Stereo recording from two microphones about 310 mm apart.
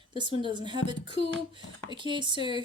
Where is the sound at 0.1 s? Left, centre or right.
Centre.